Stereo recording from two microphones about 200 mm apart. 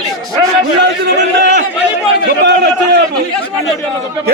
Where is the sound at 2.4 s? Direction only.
60° right (ahead or behind).